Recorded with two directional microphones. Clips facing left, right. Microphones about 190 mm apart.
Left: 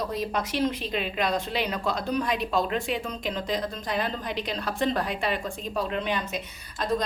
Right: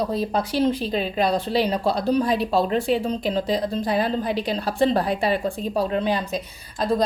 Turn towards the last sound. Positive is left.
turn(degrees=-35)  # may be behind; listen again after turning